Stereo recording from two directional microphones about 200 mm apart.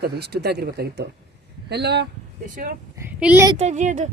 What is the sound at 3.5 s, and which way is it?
Speech, 35° right (ahead or behind).